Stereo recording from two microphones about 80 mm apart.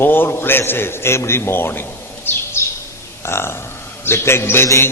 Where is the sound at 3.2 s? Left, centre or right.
Left.